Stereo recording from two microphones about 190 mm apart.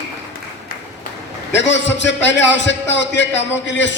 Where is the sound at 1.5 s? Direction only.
70° left (ahead or behind).